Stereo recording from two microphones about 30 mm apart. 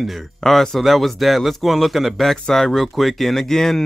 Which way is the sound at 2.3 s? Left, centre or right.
Centre.